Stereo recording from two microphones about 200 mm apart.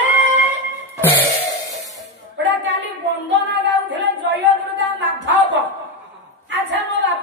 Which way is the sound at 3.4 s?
60° right (ahead or behind).